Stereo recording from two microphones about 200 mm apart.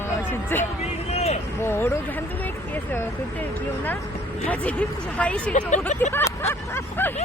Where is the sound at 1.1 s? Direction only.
30° left (ahead or behind).